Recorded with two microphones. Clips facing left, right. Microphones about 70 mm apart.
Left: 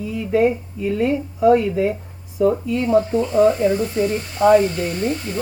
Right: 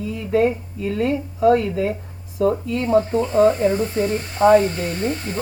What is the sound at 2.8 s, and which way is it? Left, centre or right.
Speech, right.